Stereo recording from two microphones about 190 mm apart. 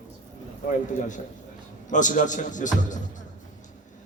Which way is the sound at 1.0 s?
40° left (ahead or behind).